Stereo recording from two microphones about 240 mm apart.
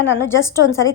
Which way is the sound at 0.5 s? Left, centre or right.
Left.